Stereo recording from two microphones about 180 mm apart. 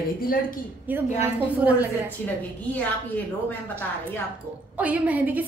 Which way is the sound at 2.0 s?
10° left (ahead or behind).